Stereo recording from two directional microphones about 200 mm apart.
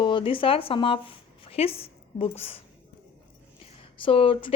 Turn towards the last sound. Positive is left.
turn(degrees=25)  # may be behind; listen again after turning